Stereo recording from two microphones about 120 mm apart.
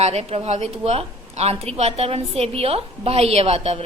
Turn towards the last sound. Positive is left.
turn(degrees=-55)  # may be behind; listen again after turning